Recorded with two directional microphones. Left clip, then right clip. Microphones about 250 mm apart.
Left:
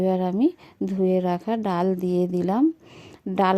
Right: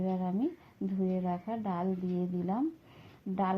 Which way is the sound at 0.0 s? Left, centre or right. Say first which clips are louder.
Left 12 dB; left.